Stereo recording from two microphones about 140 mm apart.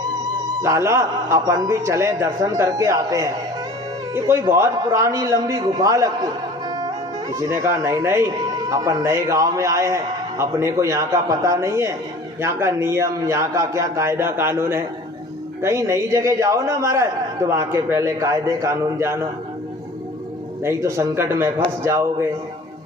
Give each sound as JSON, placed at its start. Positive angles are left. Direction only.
{"t": 0.6, "sound": "a man's voice", "side_deg": -20}
{"t": 20.7, "sound": "a man's voice", "side_deg": -20}